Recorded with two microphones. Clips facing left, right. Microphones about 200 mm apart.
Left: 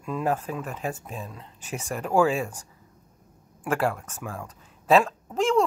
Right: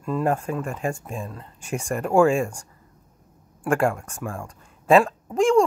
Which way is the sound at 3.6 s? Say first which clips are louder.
Right 4 dB; centre (ahead or behind).